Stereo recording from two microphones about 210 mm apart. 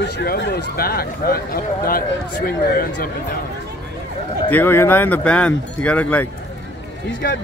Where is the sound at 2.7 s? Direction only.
45° left (ahead or behind).